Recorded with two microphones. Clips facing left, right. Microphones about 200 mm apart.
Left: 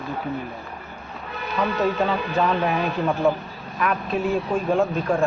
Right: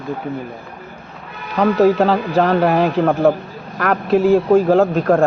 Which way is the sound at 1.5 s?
75° right (ahead or behind).